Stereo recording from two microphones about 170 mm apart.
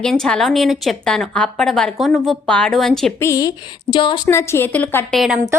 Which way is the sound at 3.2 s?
20° left (ahead or behind).